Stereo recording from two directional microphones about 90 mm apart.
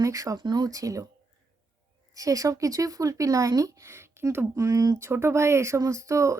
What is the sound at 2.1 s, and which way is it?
Speech, 40° right (ahead or behind).